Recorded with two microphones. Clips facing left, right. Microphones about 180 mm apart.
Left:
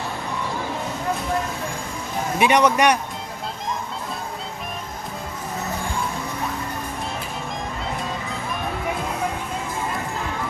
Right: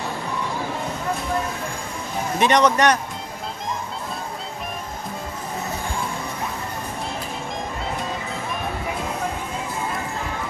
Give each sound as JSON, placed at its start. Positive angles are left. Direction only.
{"t": 2.4, "sound": "a man's voice", "side_deg": 10}